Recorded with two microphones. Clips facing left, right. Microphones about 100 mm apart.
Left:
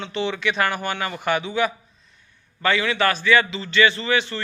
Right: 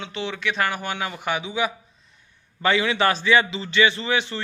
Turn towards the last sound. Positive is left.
turn(degrees=-20)  # may be behind; listen again after turning